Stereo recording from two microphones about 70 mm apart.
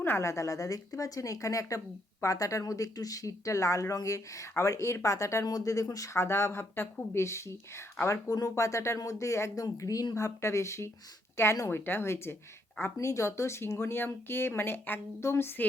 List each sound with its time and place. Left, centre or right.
0.0 s speech: left
8.0 s speech: left
10.2 s speech: left